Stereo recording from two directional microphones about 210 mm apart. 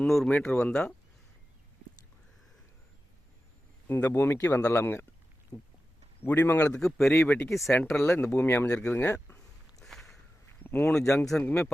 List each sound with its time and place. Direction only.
0.0 s speech: 5° left (ahead or behind)
3.8 s speech: 10° left (ahead or behind)
5.5 s a sound: 20° left (ahead or behind)
6.2 s speech: 10° left (ahead or behind)
9.8 s a sound: centre (ahead or behind)
10.6 s speech: 10° left (ahead or behind)